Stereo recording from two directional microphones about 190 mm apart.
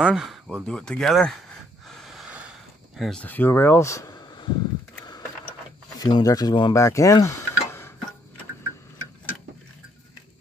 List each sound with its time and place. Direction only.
0.0 s a sound: centre (ahead or behind)
3.0 s speech: 5° left (ahead or behind)
5.9 s speech: 20° left (ahead or behind)